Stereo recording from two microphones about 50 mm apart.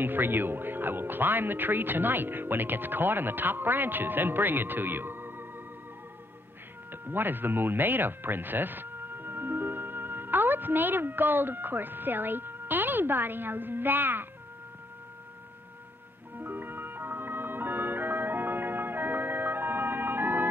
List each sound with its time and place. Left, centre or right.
0.0 s speech: right
6.9 s speech: right
16.3 s music: right